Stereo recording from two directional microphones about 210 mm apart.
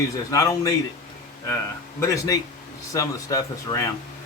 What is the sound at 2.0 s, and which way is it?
Speech, 15° left (ahead or behind).